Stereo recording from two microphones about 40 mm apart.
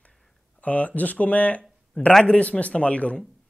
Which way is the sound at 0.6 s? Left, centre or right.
Left.